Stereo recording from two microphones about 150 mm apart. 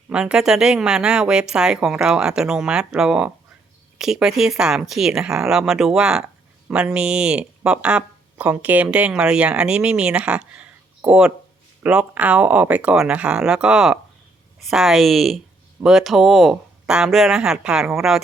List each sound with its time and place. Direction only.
0.1 s speech: 5° right (ahead or behind)